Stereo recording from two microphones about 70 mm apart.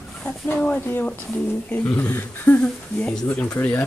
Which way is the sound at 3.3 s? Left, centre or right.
Left.